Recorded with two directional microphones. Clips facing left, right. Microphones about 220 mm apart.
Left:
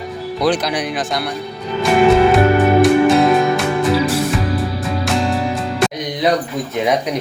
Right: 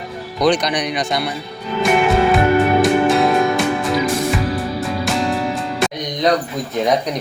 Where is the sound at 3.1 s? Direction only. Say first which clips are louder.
Left 2 dB; centre (ahead or behind).